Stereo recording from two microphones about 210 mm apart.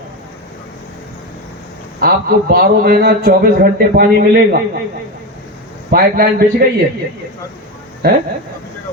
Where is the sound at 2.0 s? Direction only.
45° right (ahead or behind).